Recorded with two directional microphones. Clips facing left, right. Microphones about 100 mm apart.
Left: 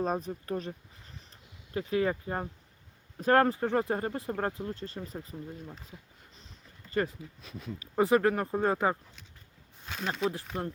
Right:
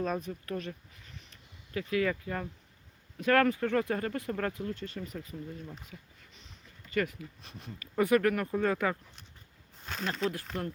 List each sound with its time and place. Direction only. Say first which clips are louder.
0.0 s speech: left 2 dB; 35° left (ahead or behind)
1.9 s speech: left 1 dB; 30° left (ahead or behind)
6.9 s speech: left 1 dB; 30° left (ahead or behind)
9.8 s a sound: even; 5° left (ahead or behind)
10.1 s speech: left 2 dB; 10° left (ahead or behind)
10.5 s speech: left 1 dB; 25° left (ahead or behind)